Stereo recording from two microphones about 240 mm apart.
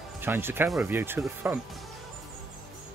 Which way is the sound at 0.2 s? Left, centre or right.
Centre.